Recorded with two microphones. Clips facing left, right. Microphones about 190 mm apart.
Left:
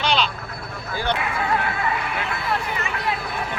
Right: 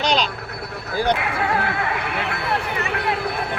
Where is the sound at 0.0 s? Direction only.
40° right (ahead or behind).